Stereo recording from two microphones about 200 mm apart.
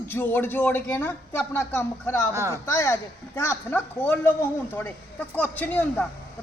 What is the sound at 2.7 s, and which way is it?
Speech, 15° left (ahead or behind).